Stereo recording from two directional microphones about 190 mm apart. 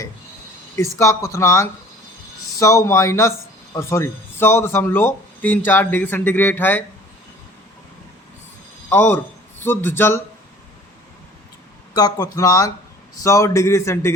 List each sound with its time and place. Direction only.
0.8 s speech: 15° left (ahead or behind)
8.9 s speech: 10° left (ahead or behind)
11.9 s speech: 20° left (ahead or behind)